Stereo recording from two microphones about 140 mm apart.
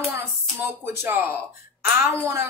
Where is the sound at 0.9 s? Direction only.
15° right (ahead or behind).